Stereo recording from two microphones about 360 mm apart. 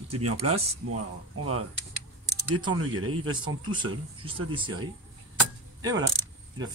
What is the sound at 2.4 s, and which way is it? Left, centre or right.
Speech, centre.